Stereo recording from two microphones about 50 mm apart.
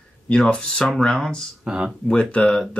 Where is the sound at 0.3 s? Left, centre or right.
Centre.